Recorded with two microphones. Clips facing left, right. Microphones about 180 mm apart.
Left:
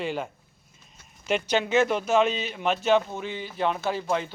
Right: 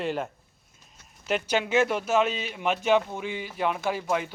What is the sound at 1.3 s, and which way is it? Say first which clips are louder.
Speech: left 1 dB; 5° right (ahead or behind).